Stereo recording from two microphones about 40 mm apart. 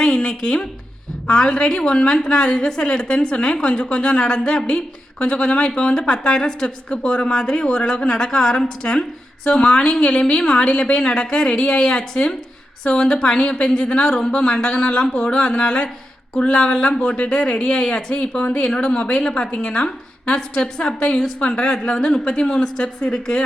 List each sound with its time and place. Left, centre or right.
0.0 s a sound: left
1.3 s a woman's voice: left
4.3 s a woman's voice: centre